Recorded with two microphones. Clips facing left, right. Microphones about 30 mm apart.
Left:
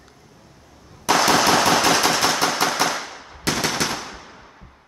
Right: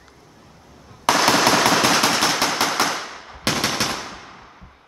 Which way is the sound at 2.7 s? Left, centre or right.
Centre.